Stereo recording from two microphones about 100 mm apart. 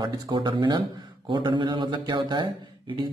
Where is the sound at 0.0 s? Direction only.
50° right (ahead or behind).